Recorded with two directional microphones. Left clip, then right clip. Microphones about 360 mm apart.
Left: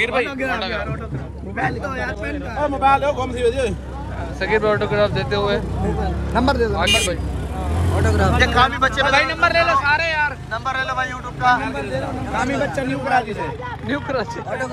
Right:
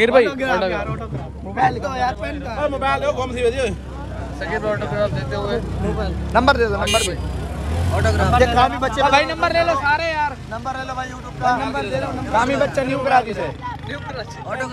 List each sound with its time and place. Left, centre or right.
0.0 s speech: right
2.8 s speech: centre
6.3 s speech: centre
7.9 s speech: centre
8.4 s speech: centre
10.5 s speech: centre
11.6 s speech: centre